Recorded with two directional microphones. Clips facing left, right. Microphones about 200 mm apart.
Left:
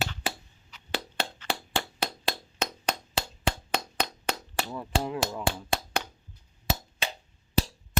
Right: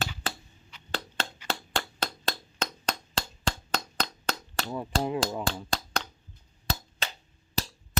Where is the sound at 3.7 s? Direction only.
10° left (ahead or behind).